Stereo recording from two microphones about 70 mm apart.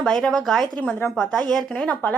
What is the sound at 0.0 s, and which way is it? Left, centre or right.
A woman's voice, centre.